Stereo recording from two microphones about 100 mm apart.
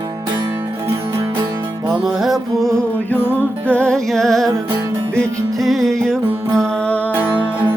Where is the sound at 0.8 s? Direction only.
25° right (ahead or behind).